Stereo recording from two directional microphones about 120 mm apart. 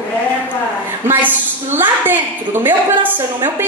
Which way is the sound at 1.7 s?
15° right (ahead or behind).